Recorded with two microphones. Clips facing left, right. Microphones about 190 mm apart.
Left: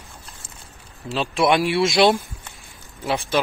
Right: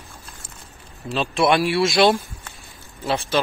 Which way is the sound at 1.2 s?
15° left (ahead or behind).